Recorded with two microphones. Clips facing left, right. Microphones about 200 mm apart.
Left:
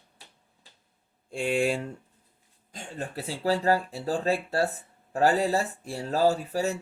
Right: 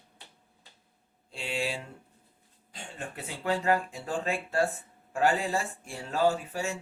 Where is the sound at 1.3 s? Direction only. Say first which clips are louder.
Left 8 dB; 50° left (ahead or behind).